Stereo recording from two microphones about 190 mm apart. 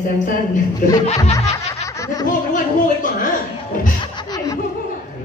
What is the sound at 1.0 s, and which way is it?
Music, 35° left (ahead or behind).